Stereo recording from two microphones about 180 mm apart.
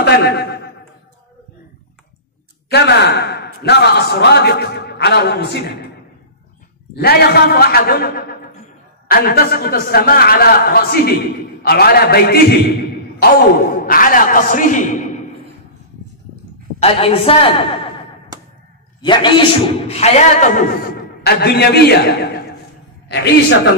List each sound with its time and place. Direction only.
0.0 s a man's voice: 65° left (ahead or behind)
2.7 s speech: 65° left (ahead or behind)
7.0 s speech: 60° left (ahead or behind); by 15.1 s 45° left (ahead or behind)
16.8 s a woman's voice: 35° left (ahead or behind)
18.9 s a man's voice: 25° left (ahead or behind); by 23.7 s 70° left (ahead or behind)